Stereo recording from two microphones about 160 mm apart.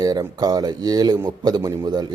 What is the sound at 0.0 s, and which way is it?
Speech, 25° right (ahead or behind).